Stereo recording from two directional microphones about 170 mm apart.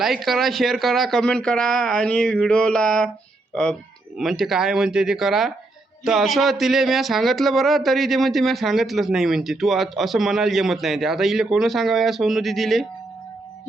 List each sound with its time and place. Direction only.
0.0 s speech: centre (ahead or behind)